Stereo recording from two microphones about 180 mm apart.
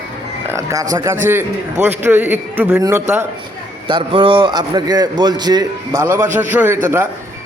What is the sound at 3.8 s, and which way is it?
A man's voice, 30° right (ahead or behind).